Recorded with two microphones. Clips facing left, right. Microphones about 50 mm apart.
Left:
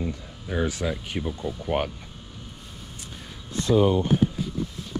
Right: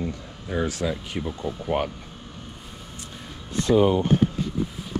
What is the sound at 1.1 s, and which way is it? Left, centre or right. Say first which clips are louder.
Speech: right 1 dB; centre.